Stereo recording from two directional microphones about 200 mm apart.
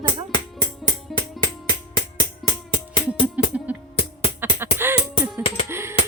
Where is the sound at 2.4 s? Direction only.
25° left (ahead or behind).